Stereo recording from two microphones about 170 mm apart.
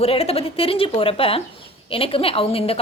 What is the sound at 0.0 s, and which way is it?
A woman's voice, 35° left (ahead or behind).